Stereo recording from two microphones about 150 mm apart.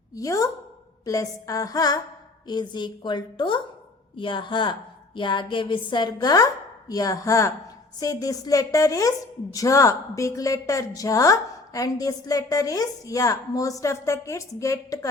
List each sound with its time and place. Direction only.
0.1 s a woman's voice: 20° left (ahead or behind)